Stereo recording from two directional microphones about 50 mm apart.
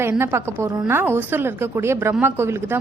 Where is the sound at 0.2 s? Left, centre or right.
Right.